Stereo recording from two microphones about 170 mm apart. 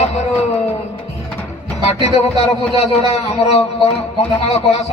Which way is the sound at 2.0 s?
35° left (ahead or behind).